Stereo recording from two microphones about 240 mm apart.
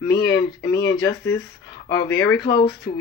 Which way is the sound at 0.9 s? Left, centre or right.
Centre.